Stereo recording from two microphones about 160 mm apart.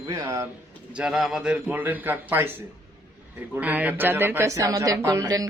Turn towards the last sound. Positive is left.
turn(degrees=-20)  # may be behind; listen again after turning